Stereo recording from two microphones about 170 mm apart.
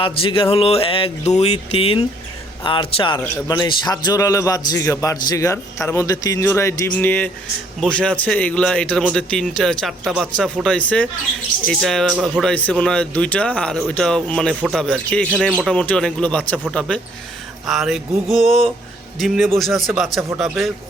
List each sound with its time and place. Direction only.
0.0 s a sound: 30° left (ahead or behind)
2.6 s a man's voice: 30° left (ahead or behind); by 15.3 s 5° left (ahead or behind)
15.3 s speech: 5° right (ahead or behind)
17.7 s speech: centre (ahead or behind)